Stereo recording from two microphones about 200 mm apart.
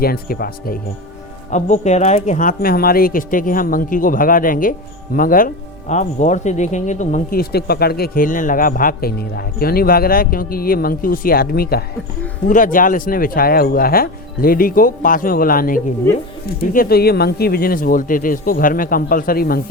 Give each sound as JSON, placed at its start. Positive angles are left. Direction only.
{"t": 0.0, "sound": "speech", "side_deg": 50}
{"t": 1.5, "sound": "speech", "side_deg": 35}